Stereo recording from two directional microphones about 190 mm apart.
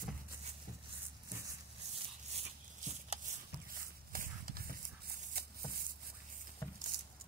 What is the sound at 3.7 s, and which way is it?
Horse, 45° right (ahead or behind).